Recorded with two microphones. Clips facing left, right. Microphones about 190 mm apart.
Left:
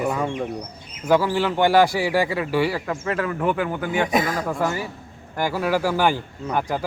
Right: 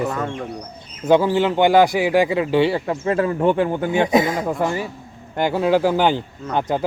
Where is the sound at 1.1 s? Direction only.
20° right (ahead or behind).